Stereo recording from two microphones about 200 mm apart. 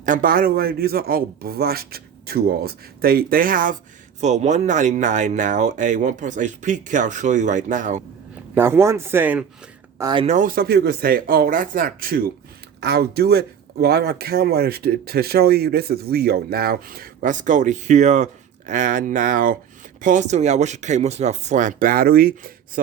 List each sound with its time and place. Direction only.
0.0 s speech: 40° right (ahead or behind)
8.5 s speech: 10° right (ahead or behind)
10.0 s speech: 20° right (ahead or behind)
10.2 s speech: 40° right (ahead or behind)